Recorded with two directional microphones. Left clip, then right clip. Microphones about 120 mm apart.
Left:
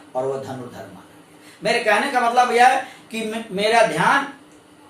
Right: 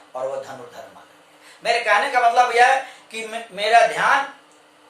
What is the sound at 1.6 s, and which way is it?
Speech, 25° right (ahead or behind).